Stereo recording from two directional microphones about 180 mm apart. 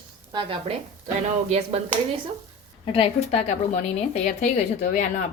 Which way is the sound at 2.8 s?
30° left (ahead or behind).